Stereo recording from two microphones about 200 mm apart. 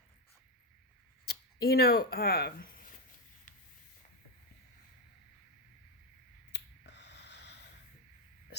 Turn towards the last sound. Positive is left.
turn(degrees=60)  # may be behind; listen again after turning